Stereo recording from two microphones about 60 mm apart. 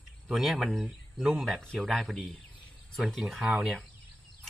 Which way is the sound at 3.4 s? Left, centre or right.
Centre.